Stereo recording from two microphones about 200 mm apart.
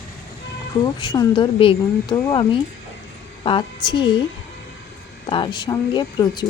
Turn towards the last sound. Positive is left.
turn(degrees=20)  # may be behind; listen again after turning